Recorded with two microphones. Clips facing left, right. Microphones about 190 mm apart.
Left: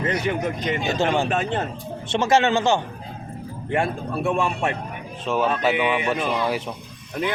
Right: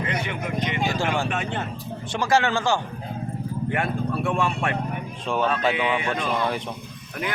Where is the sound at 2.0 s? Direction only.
25° left (ahead or behind).